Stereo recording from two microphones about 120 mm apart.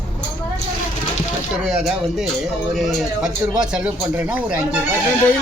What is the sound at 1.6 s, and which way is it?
Speech, centre (ahead or behind).